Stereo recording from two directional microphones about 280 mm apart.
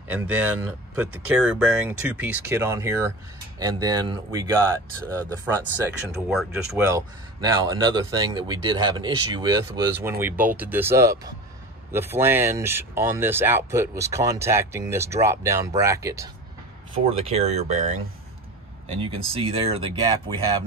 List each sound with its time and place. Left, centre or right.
0.1 s speech: centre
5.0 s speech: centre
6.3 s speech: centre; by 17.8 s right
18.9 s speech: centre